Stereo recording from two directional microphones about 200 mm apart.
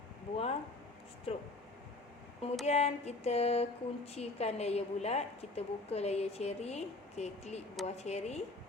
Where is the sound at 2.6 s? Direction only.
35° left (ahead or behind).